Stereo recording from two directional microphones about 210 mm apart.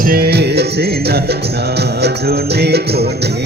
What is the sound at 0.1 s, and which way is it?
Music, 50° right (ahead or behind).